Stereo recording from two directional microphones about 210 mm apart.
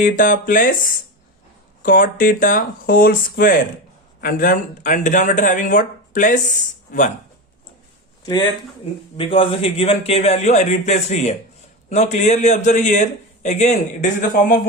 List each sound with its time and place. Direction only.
0.0 s speech: 40° left (ahead or behind)
1.8 s speech: 40° left (ahead or behind)
9.1 s a man's voice: 25° left (ahead or behind)